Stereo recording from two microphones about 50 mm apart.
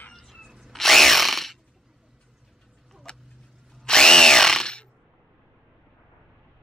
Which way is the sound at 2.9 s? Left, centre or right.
Centre.